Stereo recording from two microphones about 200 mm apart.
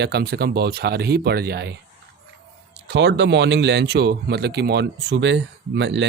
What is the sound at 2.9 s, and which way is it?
Speech, 60° right (ahead or behind).